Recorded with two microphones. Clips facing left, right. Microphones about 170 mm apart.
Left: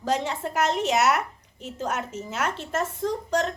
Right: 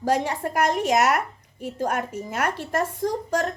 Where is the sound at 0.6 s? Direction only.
10° right (ahead or behind).